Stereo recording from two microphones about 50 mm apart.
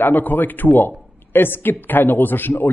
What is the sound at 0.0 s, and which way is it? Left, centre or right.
Speech, left.